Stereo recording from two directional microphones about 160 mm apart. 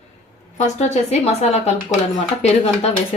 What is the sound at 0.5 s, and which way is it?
A woman's voice, 45° left (ahead or behind).